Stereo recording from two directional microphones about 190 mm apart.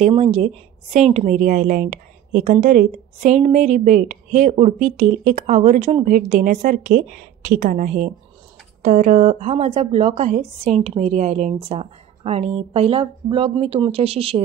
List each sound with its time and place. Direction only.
0.0 s a woman's voice: 35° right (ahead or behind)
6.1 s a woman's voice: 45° right (ahead or behind)